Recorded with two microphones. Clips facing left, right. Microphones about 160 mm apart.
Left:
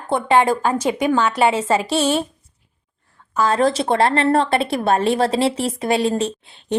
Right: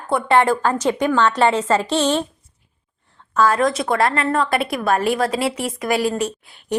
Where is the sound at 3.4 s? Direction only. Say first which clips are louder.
Left 2 dB; 30° left (ahead or behind).